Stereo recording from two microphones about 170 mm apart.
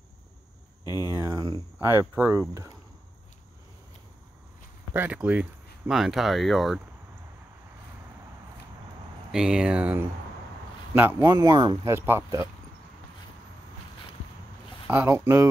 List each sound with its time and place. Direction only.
0.8 s speech: 25° left (ahead or behind)
1.1 s speech: 20° right (ahead or behind)
4.9 s speech: 10° right (ahead or behind)
9.3 s a man's voice: 5° right (ahead or behind)
11.2 s speech: 25° right (ahead or behind)
14.9 s speech: 10° right (ahead or behind)